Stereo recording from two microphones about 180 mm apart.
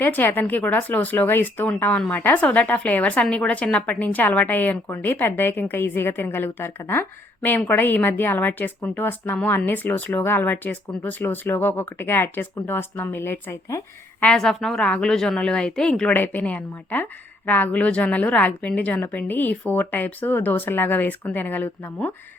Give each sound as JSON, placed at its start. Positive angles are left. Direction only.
{"t": 0.0, "sound": "speech", "side_deg": 10}
{"t": 14.3, "sound": "speech", "side_deg": 5}